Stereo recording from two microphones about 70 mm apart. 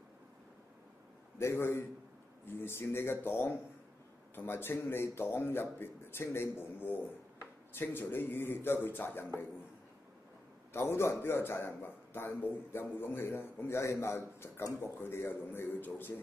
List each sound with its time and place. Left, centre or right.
1.4 s a man's voice: left
10.7 s a man's voice: left
13.7 s a man's voice: left